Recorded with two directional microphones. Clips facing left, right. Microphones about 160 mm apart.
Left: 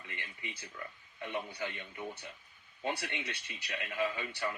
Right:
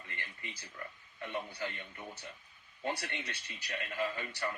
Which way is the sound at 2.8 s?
20° left (ahead or behind).